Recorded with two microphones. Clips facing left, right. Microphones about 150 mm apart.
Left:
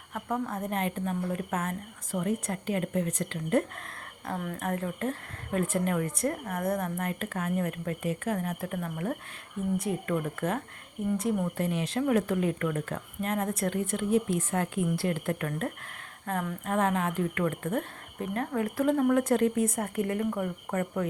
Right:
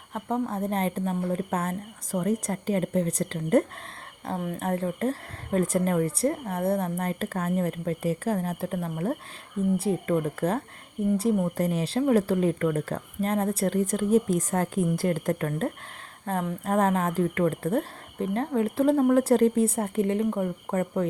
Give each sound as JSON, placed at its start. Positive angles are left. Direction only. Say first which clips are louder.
{"t": 0.1, "sound": "a woman's voice", "louder": "right 4 dB", "side_deg": -30}
{"t": 4.3, "sound": "a woman's voice", "louder": "right 4 dB", "side_deg": -25}